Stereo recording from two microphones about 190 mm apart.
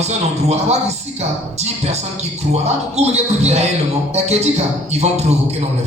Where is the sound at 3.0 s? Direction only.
35° right (ahead or behind).